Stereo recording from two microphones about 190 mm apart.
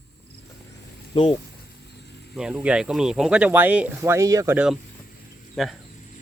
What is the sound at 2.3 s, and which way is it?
Speech, 5° right (ahead or behind).